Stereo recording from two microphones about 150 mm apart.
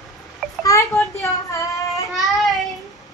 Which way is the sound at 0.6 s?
20° left (ahead or behind).